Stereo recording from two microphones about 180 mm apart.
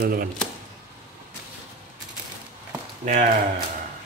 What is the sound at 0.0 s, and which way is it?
Speech, 55° right (ahead or behind).